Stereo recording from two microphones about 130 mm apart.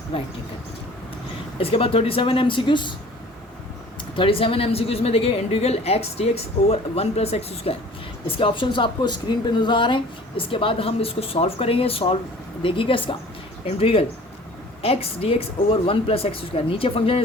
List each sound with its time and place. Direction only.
0.1 s speech: 40° left (ahead or behind)
1.5 s speech: 45° left (ahead or behind)
4.1 s speech: 40° left (ahead or behind)